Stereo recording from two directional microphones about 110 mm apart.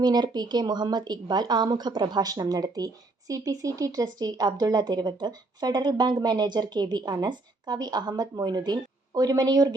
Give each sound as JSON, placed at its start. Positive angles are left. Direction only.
{"t": 0.0, "sound": "speech", "side_deg": -40}